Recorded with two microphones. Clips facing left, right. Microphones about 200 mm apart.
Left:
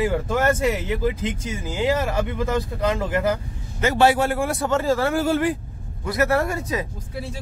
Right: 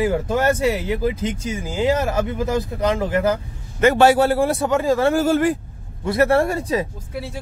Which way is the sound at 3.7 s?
55° right (ahead or behind).